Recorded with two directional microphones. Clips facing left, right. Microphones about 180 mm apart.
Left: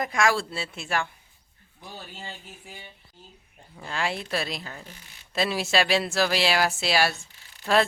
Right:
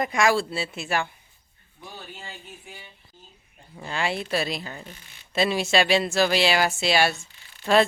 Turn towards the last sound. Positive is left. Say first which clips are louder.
# right 3 dB
turn(degrees=0)  # may be behind; listen again after turning